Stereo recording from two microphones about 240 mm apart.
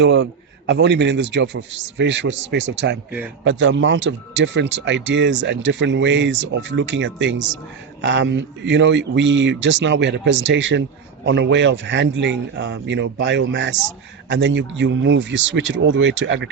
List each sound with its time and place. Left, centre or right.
0.0 s speech: right